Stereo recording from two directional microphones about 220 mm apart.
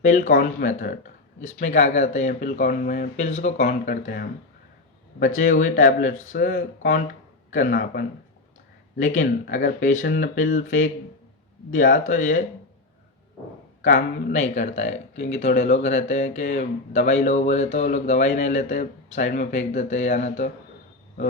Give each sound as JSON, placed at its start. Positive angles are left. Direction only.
{"t": 0.0, "sound": "speech", "side_deg": 35}
{"t": 5.5, "sound": "speech", "side_deg": 35}
{"t": 11.9, "sound": "speech", "side_deg": 35}
{"t": 13.8, "sound": "speech", "side_deg": 35}